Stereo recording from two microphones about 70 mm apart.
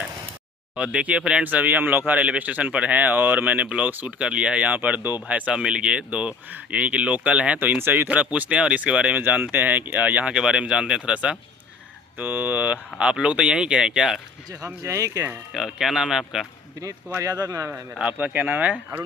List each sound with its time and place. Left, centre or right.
0.8 s speech: centre
5.2 s speech: centre
14.8 s speech: right
15.5 s speech: centre
17.2 s speech: right
18.0 s speech: right